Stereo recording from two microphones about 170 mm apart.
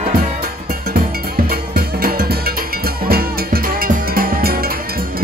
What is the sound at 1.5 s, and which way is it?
Music, 60° right (ahead or behind).